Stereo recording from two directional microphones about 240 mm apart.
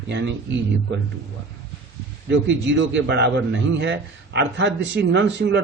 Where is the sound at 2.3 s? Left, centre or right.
Right.